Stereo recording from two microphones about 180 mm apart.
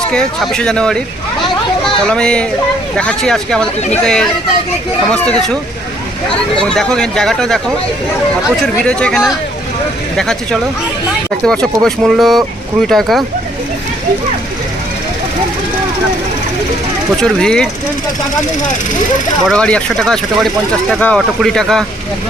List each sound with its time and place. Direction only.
0.1 s speech: 5° left (ahead or behind)
6.6 s speech: 5° left (ahead or behind)
8.6 s speech: 5° left (ahead or behind)
17.2 s speech: 5° left (ahead or behind)
19.5 s speech: 5° left (ahead or behind)